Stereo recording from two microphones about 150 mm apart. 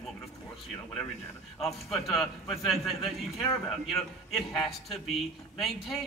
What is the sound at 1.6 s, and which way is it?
A man's voice, centre (ahead or behind).